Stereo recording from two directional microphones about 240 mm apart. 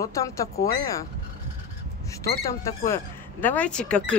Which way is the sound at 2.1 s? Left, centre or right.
Centre.